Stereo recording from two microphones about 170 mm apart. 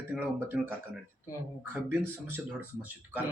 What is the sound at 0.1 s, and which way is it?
Speech, 10° right (ahead or behind).